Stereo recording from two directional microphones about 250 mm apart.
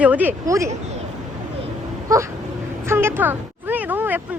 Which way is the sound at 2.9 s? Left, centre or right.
Centre.